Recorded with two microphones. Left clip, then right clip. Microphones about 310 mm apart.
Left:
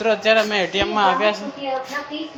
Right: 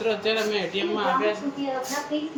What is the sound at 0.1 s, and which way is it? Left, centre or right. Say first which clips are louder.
Speech: left 9 dB; centre.